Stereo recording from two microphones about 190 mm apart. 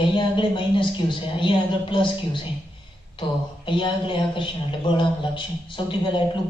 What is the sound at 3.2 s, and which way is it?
A man's voice, 25° left (ahead or behind).